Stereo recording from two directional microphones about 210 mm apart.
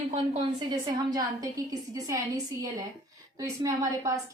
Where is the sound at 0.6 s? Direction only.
20° right (ahead or behind).